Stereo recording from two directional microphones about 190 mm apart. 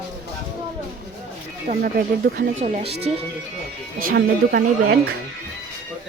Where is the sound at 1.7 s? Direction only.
55° right (ahead or behind).